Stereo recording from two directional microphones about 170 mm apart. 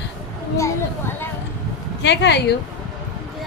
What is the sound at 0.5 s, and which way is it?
Speech, 15° left (ahead or behind).